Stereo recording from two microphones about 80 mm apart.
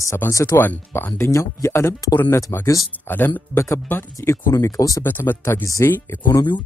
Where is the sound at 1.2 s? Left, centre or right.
Left.